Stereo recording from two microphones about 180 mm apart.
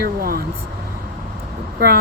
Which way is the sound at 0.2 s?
55° right (ahead or behind).